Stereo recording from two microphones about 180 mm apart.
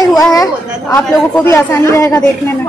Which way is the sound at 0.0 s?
20° left (ahead or behind).